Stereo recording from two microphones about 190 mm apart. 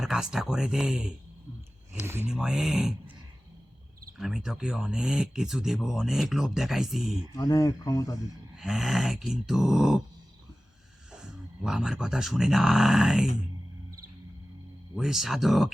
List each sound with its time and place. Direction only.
0.0 s speech: 5° right (ahead or behind)
4.2 s speech: centre (ahead or behind)
7.3 s speech: 15° left (ahead or behind)
8.5 s speech: centre (ahead or behind)
11.1 s speech: 5° right (ahead or behind)
14.9 s speech: centre (ahead or behind)